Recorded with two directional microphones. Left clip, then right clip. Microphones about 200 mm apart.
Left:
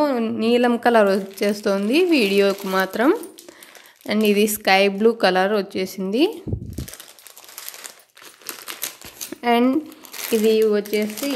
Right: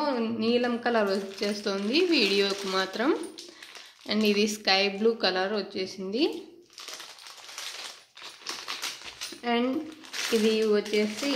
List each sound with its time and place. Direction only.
0.0 s speech: 50° left (ahead or behind)
9.4 s speech: 55° left (ahead or behind)
10.4 s speech: 45° left (ahead or behind)